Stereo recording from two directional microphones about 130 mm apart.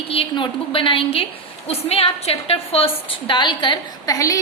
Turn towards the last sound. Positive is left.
turn(degrees=25)  # may be behind; listen again after turning